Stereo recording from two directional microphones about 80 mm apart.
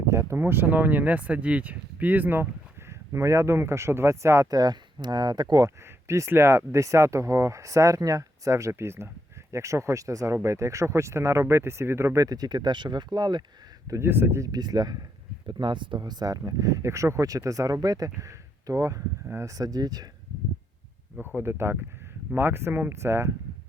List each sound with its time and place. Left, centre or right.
0.1 s speech: right
3.1 s speech: right
4.6 s speech: right
5.6 s speech: right
12.2 s speech: right
14.0 s speech: right
14.4 s speech: right
15.4 s speech: right
19.5 s speech: right
21.3 s speech: right